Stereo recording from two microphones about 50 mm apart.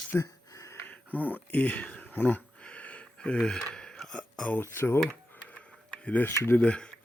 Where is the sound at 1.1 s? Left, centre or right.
Left.